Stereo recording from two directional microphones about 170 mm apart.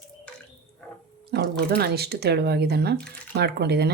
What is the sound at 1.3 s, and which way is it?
A woman's voice, 70° right (ahead or behind).